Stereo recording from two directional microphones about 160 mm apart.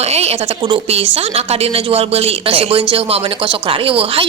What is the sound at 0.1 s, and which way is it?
A woman's voice, 40° right (ahead or behind).